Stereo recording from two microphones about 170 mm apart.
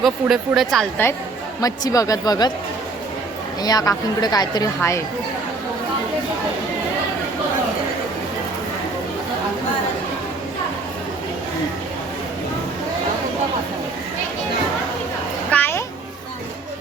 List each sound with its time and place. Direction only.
0.0 s speech: centre (ahead or behind)
1.6 s a woman's voice: 20° left (ahead or behind)
3.6 s a woman's voice: 20° left (ahead or behind)
15.4 s a sound: 10° left (ahead or behind)